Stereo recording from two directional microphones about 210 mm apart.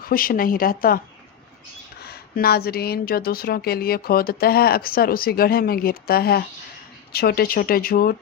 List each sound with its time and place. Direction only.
0.0 s speech: 45° left (ahead or behind)
2.0 s speech: 50° left (ahead or behind)